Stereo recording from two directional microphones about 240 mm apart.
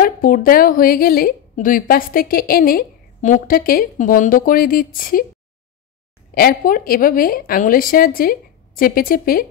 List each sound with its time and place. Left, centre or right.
0.0 s a woman's voice: left
6.3 s a woman's voice: left